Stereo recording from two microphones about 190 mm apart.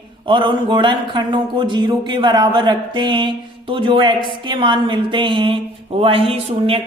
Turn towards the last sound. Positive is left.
turn(degrees=-30)  # may be behind; listen again after turning